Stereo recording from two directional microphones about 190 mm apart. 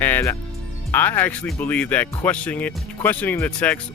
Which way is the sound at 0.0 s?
10° left (ahead or behind).